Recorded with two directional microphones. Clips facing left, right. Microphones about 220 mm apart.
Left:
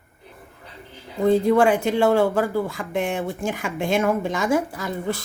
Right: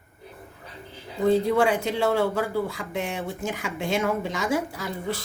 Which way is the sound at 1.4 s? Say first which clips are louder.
Left 5 dB; 50° left (ahead or behind).